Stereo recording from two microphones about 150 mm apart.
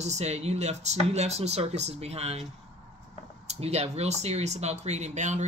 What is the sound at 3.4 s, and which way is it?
Speech, 45° right (ahead or behind).